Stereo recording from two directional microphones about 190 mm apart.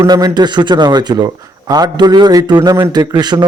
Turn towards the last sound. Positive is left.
turn(degrees=-20)  # may be behind; listen again after turning